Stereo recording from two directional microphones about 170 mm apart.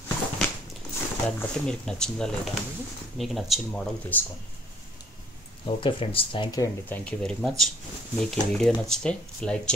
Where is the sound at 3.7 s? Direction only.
10° left (ahead or behind).